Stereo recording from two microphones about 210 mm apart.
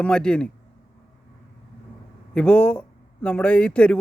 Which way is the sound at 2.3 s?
5° left (ahead or behind).